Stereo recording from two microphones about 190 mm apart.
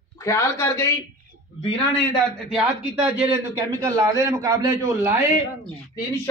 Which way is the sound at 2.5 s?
5° right (ahead or behind).